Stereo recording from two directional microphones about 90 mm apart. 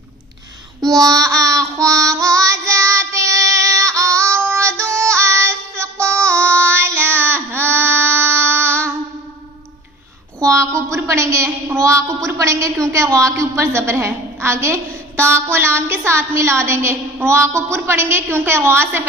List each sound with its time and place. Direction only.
0.9 s child singing: 40° right (ahead or behind); by 8.9 s 25° right (ahead or behind)
10.4 s a woman's voice: 35° right (ahead or behind)